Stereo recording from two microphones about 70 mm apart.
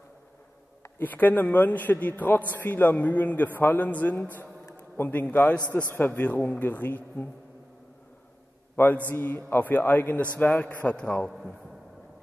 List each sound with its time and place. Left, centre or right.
0.9 s a man's voice: left
8.7 s a man's voice: left